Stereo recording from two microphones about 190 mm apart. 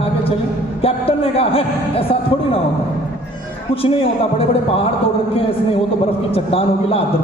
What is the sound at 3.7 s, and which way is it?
A man's voice, 30° left (ahead or behind).